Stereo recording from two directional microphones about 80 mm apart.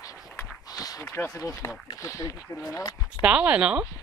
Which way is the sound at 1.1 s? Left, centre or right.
Left.